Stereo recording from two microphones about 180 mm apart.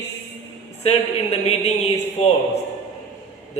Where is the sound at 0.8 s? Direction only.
35° left (ahead or behind).